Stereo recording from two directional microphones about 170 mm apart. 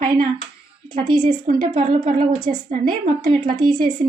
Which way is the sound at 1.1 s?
25° right (ahead or behind).